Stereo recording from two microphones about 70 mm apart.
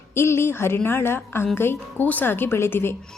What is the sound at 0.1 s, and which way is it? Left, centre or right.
A woman's voice, left.